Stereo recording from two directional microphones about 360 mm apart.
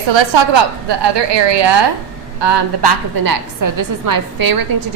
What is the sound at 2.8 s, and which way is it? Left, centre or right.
A woman's voice, right.